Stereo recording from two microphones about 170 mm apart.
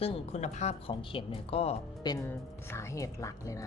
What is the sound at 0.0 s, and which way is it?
Speech, 35° left (ahead or behind).